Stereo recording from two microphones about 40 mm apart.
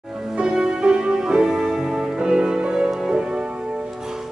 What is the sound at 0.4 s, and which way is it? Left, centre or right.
Music, right.